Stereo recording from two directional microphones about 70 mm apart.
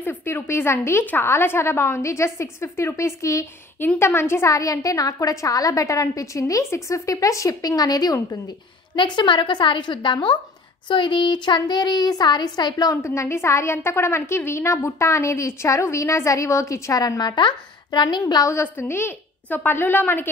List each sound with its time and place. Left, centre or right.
0.0 s a woman's voice: left
9.0 s speech: left
11.3 s speech: left
12.9 s a woman's voice: left
17.2 s speech: left
18.5 s a woman's voice: left